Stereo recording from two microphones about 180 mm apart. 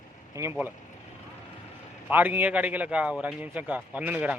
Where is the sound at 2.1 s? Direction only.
10° right (ahead or behind).